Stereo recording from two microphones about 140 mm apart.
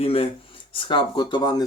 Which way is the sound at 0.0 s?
40° left (ahead or behind).